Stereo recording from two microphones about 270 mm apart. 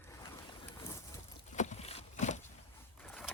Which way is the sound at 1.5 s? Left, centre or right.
Left.